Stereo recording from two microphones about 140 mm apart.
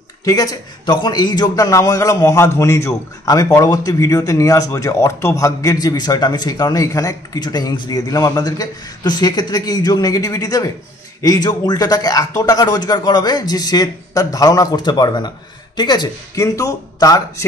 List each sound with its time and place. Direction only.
0.2 s a man's voice: 25° left (ahead or behind)